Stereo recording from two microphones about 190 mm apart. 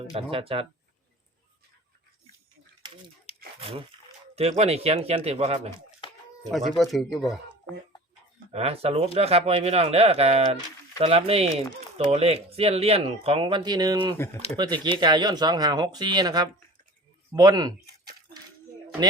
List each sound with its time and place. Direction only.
0.1 s speech: 30° right (ahead or behind)
3.6 s speech: 30° right (ahead or behind)
6.7 s speech: centre (ahead or behind)
8.5 s speech: 30° right (ahead or behind)